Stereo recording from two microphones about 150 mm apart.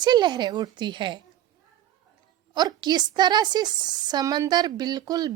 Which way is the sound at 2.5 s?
30° right (ahead or behind).